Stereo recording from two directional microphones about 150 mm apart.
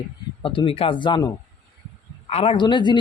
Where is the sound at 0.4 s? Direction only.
35° left (ahead or behind).